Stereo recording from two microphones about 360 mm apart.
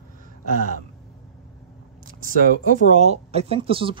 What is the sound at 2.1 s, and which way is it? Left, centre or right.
Speech, right.